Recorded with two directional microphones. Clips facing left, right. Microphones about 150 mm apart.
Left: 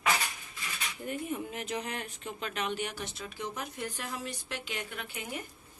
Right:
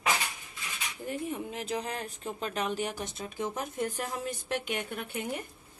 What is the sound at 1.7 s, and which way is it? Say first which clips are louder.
A woman's voice: right 3 dB; 30° right (ahead or behind).